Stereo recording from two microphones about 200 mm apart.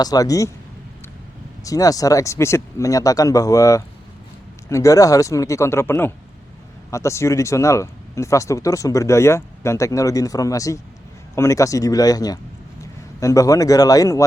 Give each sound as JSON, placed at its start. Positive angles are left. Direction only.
{"t": 0.0, "sound": "speech", "side_deg": 20}
{"t": 1.6, "sound": "speech", "side_deg": 15}